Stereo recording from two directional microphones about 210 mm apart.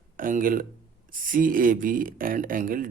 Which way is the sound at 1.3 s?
40° right (ahead or behind).